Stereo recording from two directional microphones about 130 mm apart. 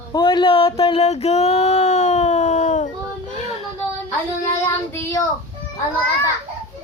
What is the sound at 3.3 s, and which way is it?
Child singing, 55° left (ahead or behind).